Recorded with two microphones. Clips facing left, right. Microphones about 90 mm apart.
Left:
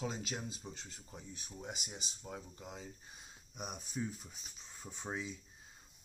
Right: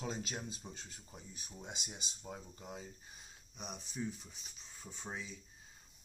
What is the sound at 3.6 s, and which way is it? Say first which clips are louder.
Speech: left 2 dB; 5° left (ahead or behind).